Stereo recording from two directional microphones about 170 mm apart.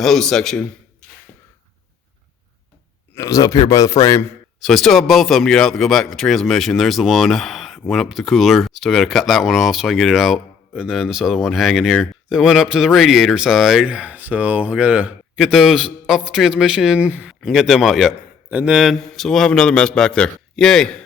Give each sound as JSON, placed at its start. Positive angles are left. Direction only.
{"t": 0.0, "sound": "speech", "side_deg": 0}
{"t": 3.2, "sound": "a man's voice", "side_deg": 20}
{"t": 4.6, "sound": "speech", "side_deg": 0}